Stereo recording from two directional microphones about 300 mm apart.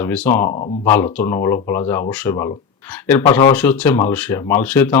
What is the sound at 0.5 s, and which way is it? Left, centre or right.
Speech, left.